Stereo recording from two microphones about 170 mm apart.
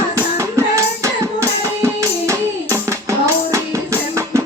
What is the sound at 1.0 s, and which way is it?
Music, 15° right (ahead or behind).